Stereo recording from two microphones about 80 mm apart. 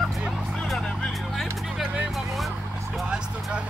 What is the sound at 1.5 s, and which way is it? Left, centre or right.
Music, centre.